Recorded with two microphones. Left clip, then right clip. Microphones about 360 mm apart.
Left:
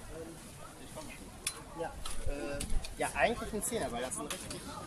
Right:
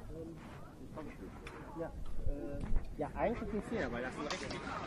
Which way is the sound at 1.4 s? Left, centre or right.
Left.